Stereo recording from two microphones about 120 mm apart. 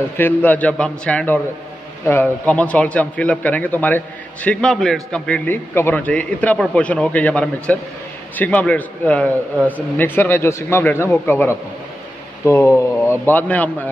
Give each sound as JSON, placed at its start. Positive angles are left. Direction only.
{"t": 0.2, "sound": "a man's voice", "side_deg": 15}